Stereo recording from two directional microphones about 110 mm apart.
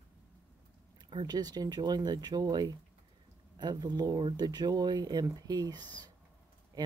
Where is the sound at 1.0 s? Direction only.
40° right (ahead or behind).